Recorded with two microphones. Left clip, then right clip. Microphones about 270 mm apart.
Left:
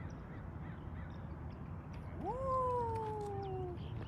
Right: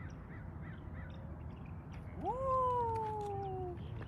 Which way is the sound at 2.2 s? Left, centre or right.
Right.